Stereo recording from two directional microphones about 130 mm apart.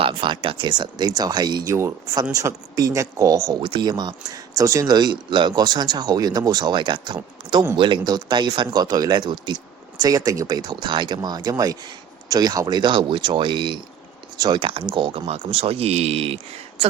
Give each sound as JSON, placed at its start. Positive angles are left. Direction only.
{"t": 0.0, "sound": "speech", "side_deg": -40}